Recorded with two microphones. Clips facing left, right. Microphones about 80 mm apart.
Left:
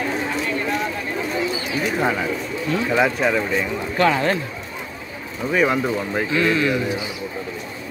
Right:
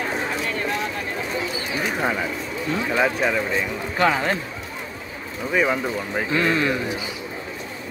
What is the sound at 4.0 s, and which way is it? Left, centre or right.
Speech, centre.